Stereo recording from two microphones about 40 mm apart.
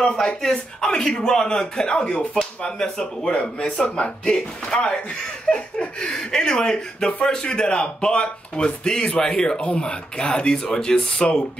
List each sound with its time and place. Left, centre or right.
0.4 s speech: centre